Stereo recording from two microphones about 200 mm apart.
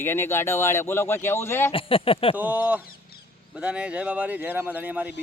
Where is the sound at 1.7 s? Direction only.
25° left (ahead or behind).